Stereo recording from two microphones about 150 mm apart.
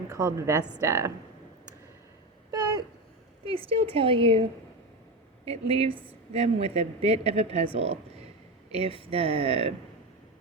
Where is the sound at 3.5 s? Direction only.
40° right (ahead or behind).